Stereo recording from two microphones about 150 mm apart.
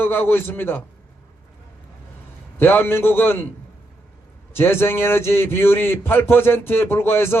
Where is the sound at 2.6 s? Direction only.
15° left (ahead or behind).